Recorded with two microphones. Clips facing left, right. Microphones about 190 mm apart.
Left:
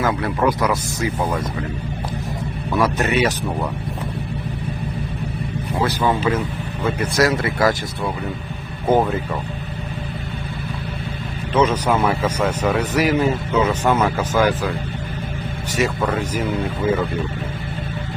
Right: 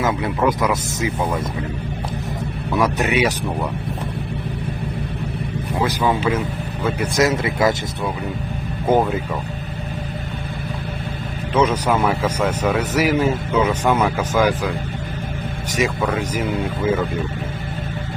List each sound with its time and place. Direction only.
0.3 s speech: centre (ahead or behind)
2.8 s speech: 15° right (ahead or behind)
5.8 s speech: 10° right (ahead or behind)
7.2 s speech: 20° right (ahead or behind)
11.5 s speech: 10° right (ahead or behind)
15.7 s speech: 10° right (ahead or behind)